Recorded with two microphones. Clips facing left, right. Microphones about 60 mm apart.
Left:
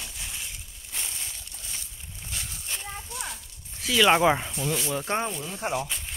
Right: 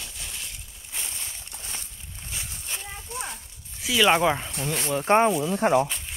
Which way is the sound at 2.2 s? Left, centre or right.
Centre.